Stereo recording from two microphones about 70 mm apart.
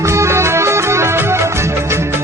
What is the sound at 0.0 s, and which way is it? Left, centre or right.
Music, right.